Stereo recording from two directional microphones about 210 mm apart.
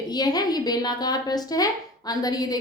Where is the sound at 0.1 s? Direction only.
20° left (ahead or behind).